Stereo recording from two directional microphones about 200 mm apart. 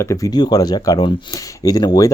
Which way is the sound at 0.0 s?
15° left (ahead or behind).